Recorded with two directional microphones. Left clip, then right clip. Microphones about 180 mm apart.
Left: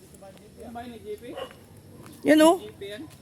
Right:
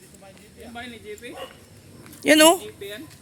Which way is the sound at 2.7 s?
30° right (ahead or behind).